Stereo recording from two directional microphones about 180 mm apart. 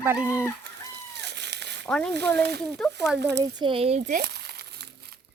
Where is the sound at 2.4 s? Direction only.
70° right (ahead or behind).